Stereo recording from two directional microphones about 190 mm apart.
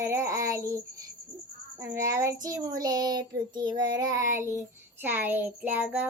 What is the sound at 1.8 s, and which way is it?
A child's voice, 15° right (ahead or behind).